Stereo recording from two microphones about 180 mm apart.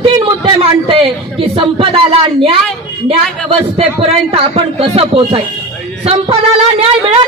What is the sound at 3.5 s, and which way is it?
A man's voice, 30° right (ahead or behind).